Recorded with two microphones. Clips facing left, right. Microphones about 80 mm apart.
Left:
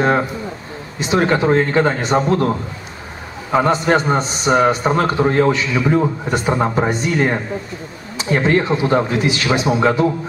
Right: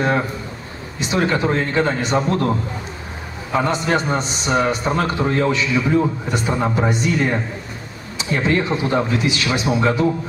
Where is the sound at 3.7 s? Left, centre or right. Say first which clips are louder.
Left 5 dB; left.